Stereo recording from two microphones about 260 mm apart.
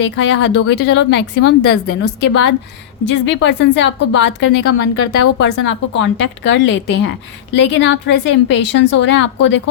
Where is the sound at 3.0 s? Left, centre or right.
Left.